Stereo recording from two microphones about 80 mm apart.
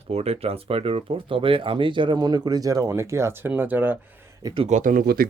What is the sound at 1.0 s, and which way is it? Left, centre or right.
Speech, right.